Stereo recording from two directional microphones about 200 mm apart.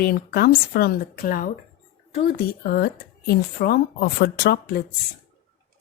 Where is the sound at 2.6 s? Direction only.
50° left (ahead or behind).